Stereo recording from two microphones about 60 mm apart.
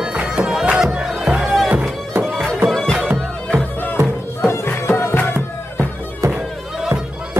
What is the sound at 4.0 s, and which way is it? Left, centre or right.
Music, right.